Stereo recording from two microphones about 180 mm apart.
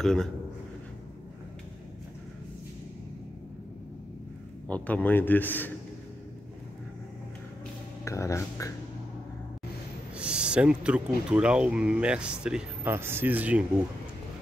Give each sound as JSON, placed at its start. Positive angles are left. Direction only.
{"t": 0.0, "sound": "speech", "side_deg": 5}
{"t": 4.6, "sound": "a man's voice", "side_deg": 10}
{"t": 8.0, "sound": "a man's voice", "side_deg": 15}
{"t": 10.1, "sound": "speech", "side_deg": -5}